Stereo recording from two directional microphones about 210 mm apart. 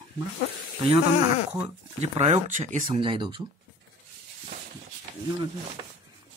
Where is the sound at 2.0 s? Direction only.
30° right (ahead or behind).